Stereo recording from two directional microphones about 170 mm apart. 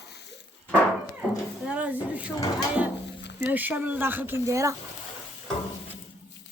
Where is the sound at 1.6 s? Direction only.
5° right (ahead or behind).